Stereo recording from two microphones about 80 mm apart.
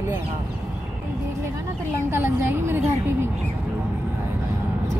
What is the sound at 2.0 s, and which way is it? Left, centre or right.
A woman's voice, right.